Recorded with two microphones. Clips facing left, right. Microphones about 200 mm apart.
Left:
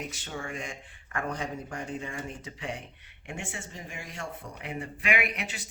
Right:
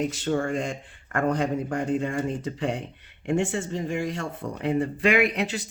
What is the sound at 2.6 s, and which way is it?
Speech, 90° right.